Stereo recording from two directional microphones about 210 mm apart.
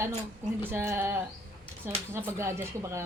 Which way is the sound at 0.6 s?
10° right (ahead or behind).